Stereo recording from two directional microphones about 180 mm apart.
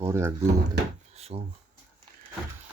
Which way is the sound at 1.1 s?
35° right (ahead or behind).